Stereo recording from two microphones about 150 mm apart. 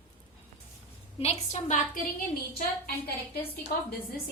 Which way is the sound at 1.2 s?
45° left (ahead or behind).